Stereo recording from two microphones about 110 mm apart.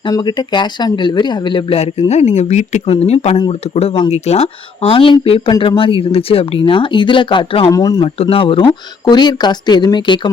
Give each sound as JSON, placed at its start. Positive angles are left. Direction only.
{"t": 0.1, "sound": "speech", "side_deg": 40}
{"t": 2.9, "sound": "speech", "side_deg": 70}
{"t": 7.7, "sound": "speech", "side_deg": 35}
{"t": 8.0, "sound": "speech", "side_deg": 60}